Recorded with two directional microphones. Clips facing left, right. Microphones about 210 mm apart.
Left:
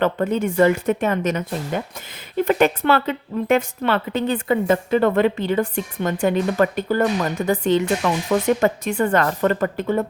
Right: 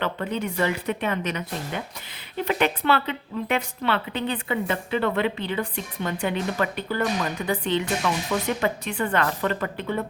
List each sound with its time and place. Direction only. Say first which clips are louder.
0.0 s a woman's voice: left 7 dB; 45° left (ahead or behind)